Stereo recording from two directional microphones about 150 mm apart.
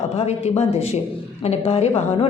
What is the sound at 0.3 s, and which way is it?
A woman's voice, 45° left (ahead or behind).